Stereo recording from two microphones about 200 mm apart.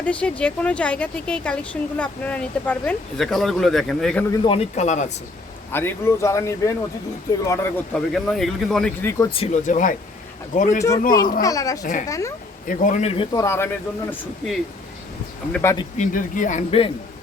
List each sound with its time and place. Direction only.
0.0 s a woman's voice: 5° left (ahead or behind)
4.3 s speech: 25° left (ahead or behind)
4.7 s a man's voice: 35° left (ahead or behind)
5.7 s speech: 10° left (ahead or behind)
8.1 s a woman's voice: centre (ahead or behind)
9.3 s a man's voice: 35° left (ahead or behind)
11.4 s speech: 15° left (ahead or behind)
11.8 s a man's voice: 40° left (ahead or behind)
12.0 s speech: 15° left (ahead or behind)
12.6 s a man's voice: 40° left (ahead or behind)
13.3 s speech: 15° left (ahead or behind)
15.5 s speech: 15° left (ahead or behind)
16.0 s a man's voice: 40° left (ahead or behind)